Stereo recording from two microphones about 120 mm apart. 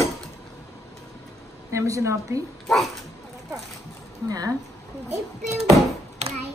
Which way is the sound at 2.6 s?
Centre (ahead or behind).